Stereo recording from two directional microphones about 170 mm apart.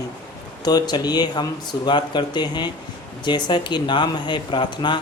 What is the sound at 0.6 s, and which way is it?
Speech, 25° left (ahead or behind).